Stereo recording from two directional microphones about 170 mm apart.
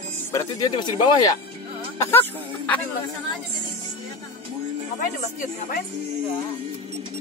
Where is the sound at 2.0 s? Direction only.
10° left (ahead or behind).